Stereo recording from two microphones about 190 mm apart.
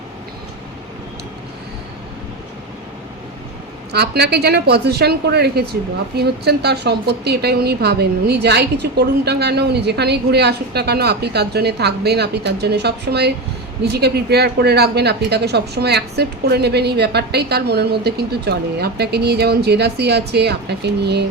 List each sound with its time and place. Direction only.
3.9 s a woman's voice: 60° right (ahead or behind)